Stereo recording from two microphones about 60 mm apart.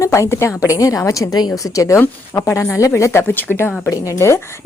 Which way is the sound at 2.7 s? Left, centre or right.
Left.